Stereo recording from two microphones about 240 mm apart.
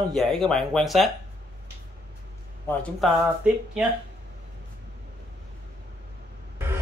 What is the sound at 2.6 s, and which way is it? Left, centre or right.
Speech, centre.